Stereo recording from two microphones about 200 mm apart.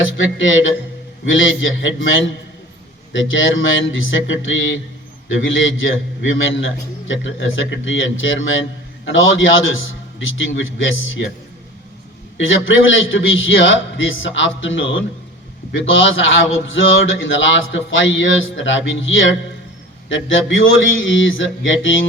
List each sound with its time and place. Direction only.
0.0 s a man's voice: 70° left (ahead or behind)
12.4 s a man's voice: 70° left (ahead or behind)